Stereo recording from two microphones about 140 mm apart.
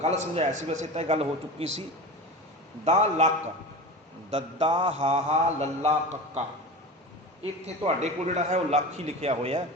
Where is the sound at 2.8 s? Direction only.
50° right (ahead or behind).